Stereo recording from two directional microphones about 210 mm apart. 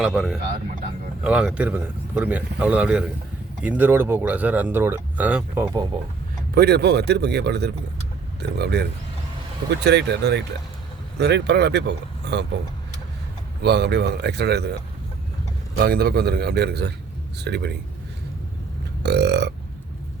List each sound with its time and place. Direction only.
0.0 s speech: centre (ahead or behind)
6.5 s speech: 50° right (ahead or behind)
13.6 s speech: 55° right (ahead or behind)
15.8 s speech: 50° right (ahead or behind)
19.0 s speech: 55° right (ahead or behind)